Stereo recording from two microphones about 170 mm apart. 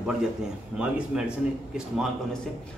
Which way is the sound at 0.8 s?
5° right (ahead or behind).